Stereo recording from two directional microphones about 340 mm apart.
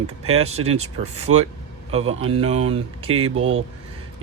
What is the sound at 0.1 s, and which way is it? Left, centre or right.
Speech, right.